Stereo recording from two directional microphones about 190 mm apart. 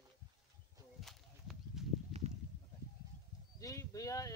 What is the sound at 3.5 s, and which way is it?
Speech, 20° left (ahead or behind).